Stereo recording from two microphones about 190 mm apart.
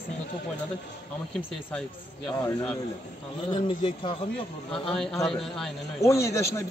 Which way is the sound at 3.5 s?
25° left (ahead or behind).